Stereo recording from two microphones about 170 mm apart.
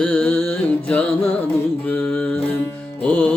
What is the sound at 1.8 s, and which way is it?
Mantra, 10° left (ahead or behind).